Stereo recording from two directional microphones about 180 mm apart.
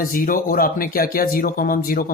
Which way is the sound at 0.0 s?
50° left (ahead or behind).